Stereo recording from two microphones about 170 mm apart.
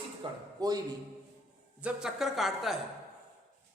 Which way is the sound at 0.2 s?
30° right (ahead or behind).